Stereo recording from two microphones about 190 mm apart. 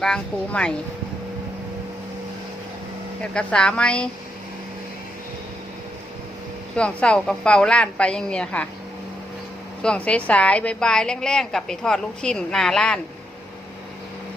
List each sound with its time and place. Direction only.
0.0 s a woman's voice: 5° left (ahead or behind)
3.3 s a woman's voice: 5° left (ahead or behind)
6.7 s a woman's voice: 5° left (ahead or behind)
9.8 s a woman's voice: 5° left (ahead or behind)